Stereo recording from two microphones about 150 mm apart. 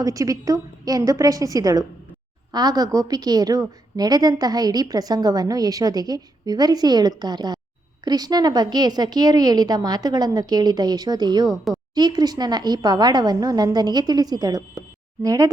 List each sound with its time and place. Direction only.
0.0 s a woman's voice: 25° right (ahead or behind)
11.4 s a woman's voice: centre (ahead or behind)
11.9 s a woman's voice: 25° right (ahead or behind)